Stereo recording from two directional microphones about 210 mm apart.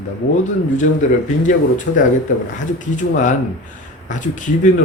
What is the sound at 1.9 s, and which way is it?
Speech, 50° left (ahead or behind).